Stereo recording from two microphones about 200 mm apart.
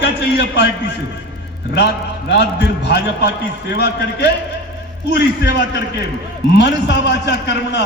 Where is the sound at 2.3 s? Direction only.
60° left (ahead or behind).